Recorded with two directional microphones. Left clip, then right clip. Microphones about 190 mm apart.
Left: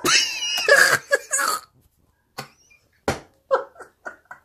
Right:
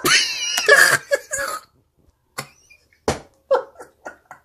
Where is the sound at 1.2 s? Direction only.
45° left (ahead or behind).